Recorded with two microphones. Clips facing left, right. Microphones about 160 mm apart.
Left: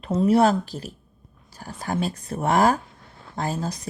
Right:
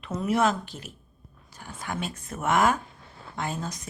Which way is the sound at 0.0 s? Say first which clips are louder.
Left 6 dB; 30° left (ahead or behind).